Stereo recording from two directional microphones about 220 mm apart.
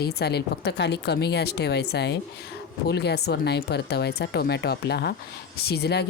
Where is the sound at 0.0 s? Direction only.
45° left (ahead or behind).